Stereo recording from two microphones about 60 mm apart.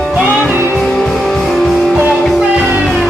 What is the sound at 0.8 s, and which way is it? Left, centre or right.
Music, centre.